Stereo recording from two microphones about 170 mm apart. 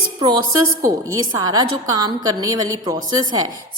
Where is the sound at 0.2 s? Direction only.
25° right (ahead or behind).